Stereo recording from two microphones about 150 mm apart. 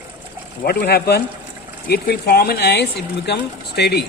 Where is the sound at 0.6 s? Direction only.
90° left.